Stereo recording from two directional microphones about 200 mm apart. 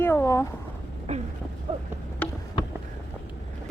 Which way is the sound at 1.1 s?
35° right (ahead or behind).